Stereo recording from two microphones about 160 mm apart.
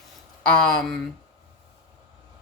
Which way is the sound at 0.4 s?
5° left (ahead or behind).